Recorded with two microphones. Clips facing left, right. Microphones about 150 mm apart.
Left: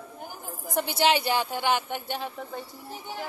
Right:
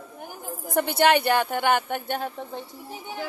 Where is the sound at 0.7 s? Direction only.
55° right (ahead or behind).